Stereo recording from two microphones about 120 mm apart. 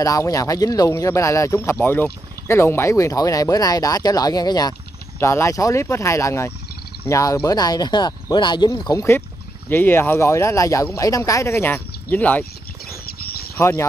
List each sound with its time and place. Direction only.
0.0 s speech: 30° left (ahead or behind)
5.2 s speech: 20° left (ahead or behind)
9.7 s speech: 15° left (ahead or behind)
13.6 s speech: 20° left (ahead or behind)